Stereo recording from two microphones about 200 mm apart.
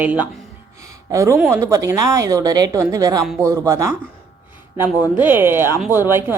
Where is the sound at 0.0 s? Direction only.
10° right (ahead or behind).